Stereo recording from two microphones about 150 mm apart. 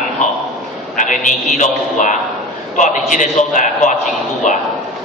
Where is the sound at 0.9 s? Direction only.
55° left (ahead or behind).